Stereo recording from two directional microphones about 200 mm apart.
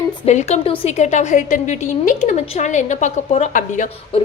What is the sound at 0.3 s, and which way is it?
A woman's voice, 35° left (ahead or behind).